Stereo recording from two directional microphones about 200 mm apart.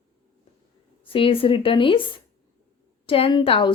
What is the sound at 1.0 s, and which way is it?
A woman's voice, 25° left (ahead or behind).